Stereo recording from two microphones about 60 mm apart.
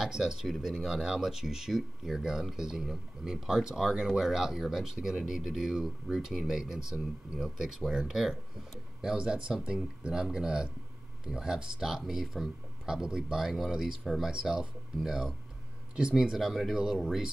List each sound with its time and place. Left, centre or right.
0.0 s speech: centre
14.3 s speech: centre